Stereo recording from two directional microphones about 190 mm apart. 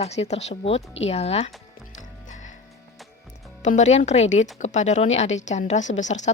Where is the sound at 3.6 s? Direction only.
40° left (ahead or behind).